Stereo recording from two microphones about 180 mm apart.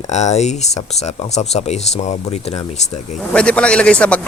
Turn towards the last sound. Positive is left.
turn(degrees=5)  # may be behind; listen again after turning